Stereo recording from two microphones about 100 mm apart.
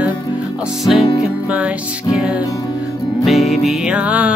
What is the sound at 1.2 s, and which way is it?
Music, 15° right (ahead or behind).